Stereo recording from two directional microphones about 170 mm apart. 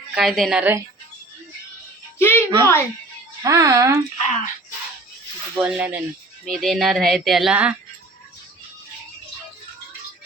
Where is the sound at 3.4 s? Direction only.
20° right (ahead or behind).